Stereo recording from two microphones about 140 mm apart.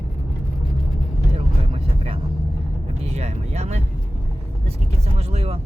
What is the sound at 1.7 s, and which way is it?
Vehicle, 45° right (ahead or behind).